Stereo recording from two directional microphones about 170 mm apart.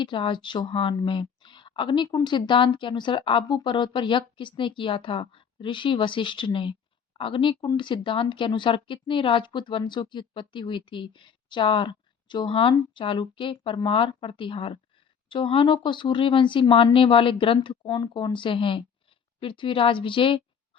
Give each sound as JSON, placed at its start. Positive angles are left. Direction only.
{"t": 0.0, "sound": "speech", "side_deg": 30}